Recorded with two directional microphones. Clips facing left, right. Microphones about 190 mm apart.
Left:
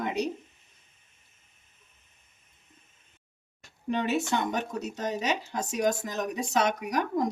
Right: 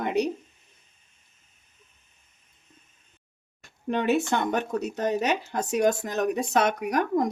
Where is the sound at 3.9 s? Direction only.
55° right (ahead or behind).